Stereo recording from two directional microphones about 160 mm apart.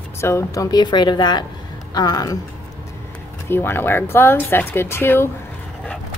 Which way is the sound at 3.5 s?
15° left (ahead or behind).